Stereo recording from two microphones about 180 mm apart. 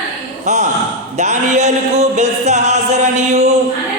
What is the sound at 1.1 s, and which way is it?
Music, 40° right (ahead or behind).